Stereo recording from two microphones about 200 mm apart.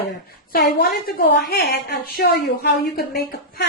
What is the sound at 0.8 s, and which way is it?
A woman's voice, 50° left (ahead or behind).